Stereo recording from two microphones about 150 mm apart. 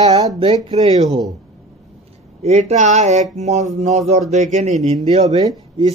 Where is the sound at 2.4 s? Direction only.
45° right (ahead or behind).